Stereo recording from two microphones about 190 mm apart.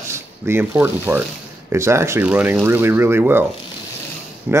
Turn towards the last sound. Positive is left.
turn(degrees=-10)  # may be behind; listen again after turning